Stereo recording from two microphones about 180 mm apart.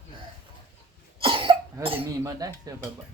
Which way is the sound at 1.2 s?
30° right (ahead or behind).